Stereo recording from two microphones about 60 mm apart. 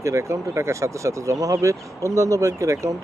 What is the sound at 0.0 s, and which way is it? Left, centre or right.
Speech, right.